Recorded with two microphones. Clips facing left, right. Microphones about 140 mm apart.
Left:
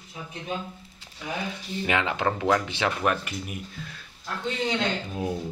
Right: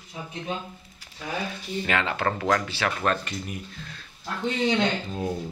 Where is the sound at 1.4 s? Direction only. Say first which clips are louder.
Even; 15° left (ahead or behind).